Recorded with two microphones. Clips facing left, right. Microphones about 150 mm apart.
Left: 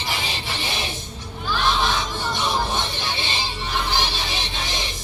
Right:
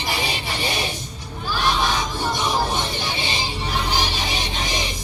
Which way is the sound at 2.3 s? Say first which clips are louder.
Even; 15° right (ahead or behind).